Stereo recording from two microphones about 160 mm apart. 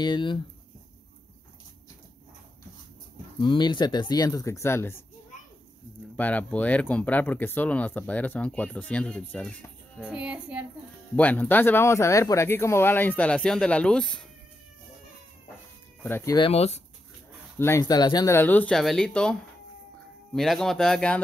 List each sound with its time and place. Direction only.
0.0 s speech: 30° left (ahead or behind)
3.3 s speech: 30° left (ahead or behind)
6.1 s speech: 10° left (ahead or behind)
9.9 s speech: 5° right (ahead or behind)
11.1 s speech: 10° left (ahead or behind)
16.0 s speech: 15° left (ahead or behind)
16.3 s speech: 35° left (ahead or behind)
17.6 s speech: 20° left (ahead or behind)
20.3 s speech: centre (ahead or behind)